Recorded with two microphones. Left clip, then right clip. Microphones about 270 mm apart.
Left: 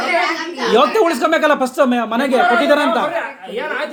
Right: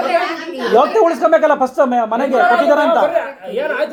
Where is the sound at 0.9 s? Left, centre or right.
Left.